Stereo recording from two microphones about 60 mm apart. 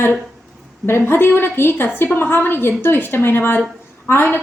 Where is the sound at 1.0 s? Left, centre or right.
Left.